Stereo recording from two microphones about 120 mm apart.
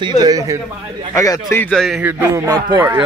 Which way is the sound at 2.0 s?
20° right (ahead or behind).